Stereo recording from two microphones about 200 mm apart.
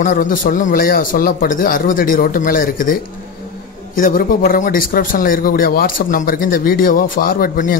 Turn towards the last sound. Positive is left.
turn(degrees=45)  # may be behind; listen again after turning